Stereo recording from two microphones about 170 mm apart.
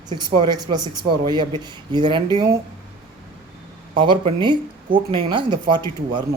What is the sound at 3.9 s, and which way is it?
Speech, 30° right (ahead or behind).